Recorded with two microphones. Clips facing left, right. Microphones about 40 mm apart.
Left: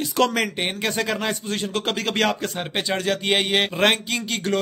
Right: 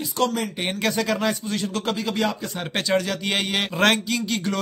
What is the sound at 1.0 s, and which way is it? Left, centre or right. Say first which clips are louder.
Speech: right 1 dB; left.